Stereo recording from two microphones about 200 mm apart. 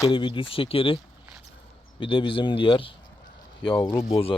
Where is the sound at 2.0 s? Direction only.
25° left (ahead or behind).